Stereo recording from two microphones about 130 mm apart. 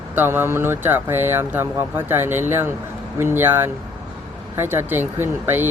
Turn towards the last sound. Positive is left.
turn(degrees=-15)  # may be behind; listen again after turning